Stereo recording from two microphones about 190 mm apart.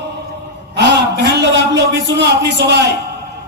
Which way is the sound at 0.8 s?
60° right (ahead or behind).